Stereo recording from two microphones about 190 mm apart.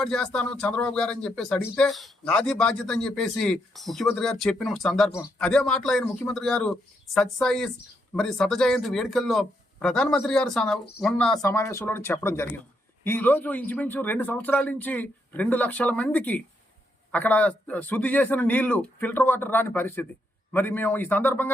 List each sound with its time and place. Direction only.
0.0 s speech: 5° left (ahead or behind)
11.4 s speech: 15° left (ahead or behind)